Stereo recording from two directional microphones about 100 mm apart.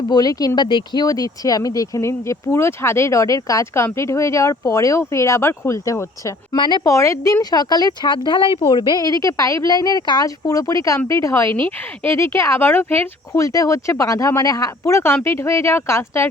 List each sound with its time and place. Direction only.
0.1 s speech: 40° left (ahead or behind)
1.0 s a woman's voice: 35° left (ahead or behind)
6.6 s speech: 50° left (ahead or behind)
6.8 s a woman's voice: 30° left (ahead or behind)
7.5 s speech: 45° left (ahead or behind)
8.7 s a woman's voice: 45° left (ahead or behind); by 16.3 s 25° left (ahead or behind)